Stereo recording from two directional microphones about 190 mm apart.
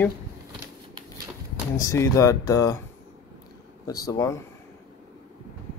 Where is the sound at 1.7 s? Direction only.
15° left (ahead or behind).